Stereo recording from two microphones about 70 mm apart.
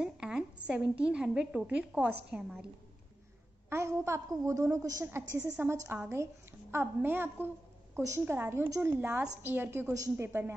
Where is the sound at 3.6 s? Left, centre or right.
Right.